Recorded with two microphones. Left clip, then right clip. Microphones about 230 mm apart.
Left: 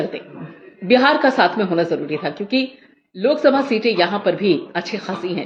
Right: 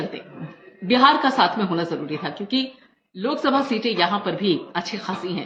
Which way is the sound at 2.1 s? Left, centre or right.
Centre.